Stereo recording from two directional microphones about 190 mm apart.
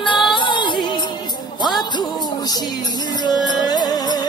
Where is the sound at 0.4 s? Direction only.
25° left (ahead or behind).